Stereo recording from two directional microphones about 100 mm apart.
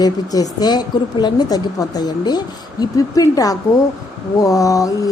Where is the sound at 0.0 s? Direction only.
40° left (ahead or behind).